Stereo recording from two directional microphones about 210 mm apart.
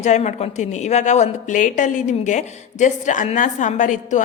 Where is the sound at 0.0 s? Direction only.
35° left (ahead or behind).